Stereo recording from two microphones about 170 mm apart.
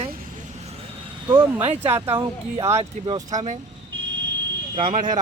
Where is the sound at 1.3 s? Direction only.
30° right (ahead or behind).